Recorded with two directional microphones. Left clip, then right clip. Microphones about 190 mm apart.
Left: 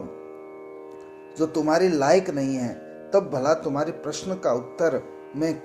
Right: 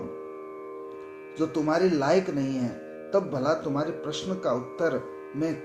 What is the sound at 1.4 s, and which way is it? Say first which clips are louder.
Speech: left 4 dB; 30° left (ahead or behind).